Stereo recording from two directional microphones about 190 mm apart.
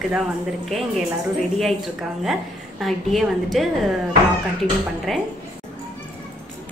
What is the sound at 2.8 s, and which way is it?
Speech, centre (ahead or behind).